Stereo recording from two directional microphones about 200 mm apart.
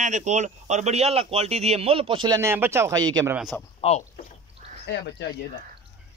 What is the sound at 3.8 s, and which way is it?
Speech, 30° left (ahead or behind).